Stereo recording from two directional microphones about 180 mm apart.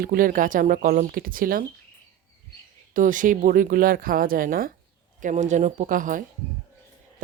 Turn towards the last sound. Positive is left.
turn(degrees=-45)  # may be behind; listen again after turning